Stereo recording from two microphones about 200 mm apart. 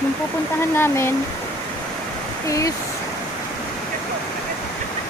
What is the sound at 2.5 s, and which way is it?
Speech, 15° left (ahead or behind).